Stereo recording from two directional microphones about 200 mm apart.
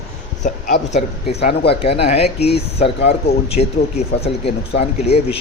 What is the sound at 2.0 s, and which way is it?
Speech, 30° left (ahead or behind).